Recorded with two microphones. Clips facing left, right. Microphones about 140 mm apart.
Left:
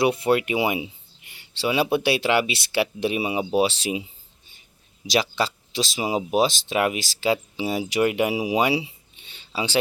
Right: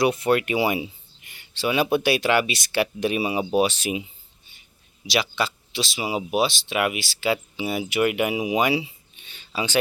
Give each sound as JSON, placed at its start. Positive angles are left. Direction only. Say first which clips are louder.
{"t": 0.0, "sound": "speech", "louder": "even", "side_deg": 25}
{"t": 5.1, "sound": "speech", "louder": "left 2 dB", "side_deg": 35}